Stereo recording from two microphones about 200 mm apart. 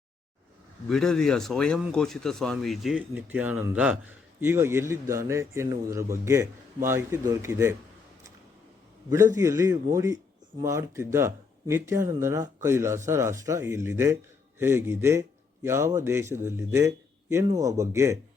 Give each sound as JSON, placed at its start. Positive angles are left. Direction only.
{"t": 0.9, "sound": "a man's voice", "side_deg": 5}
{"t": 9.0, "sound": "a man's voice", "side_deg": -15}